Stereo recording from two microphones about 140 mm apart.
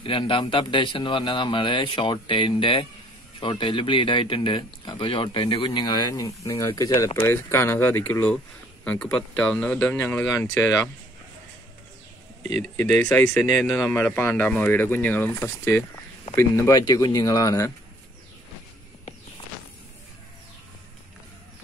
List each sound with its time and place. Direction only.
0.0 s speech: 35° left (ahead or behind); by 9.9 s 5° left (ahead or behind)
9.9 s speech: 20° left (ahead or behind)
12.7 s speech: 10° left (ahead or behind)